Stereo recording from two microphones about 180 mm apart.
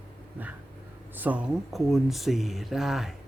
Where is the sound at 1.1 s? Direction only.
10° right (ahead or behind).